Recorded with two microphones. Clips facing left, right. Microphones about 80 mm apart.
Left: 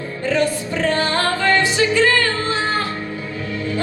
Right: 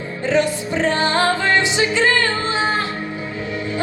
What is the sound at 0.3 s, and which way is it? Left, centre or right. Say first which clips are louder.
Music: right 1 dB; right.